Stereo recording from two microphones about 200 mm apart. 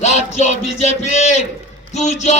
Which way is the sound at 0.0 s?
35° left (ahead or behind).